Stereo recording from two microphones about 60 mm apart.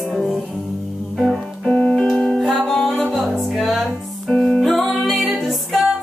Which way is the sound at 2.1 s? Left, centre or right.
Centre.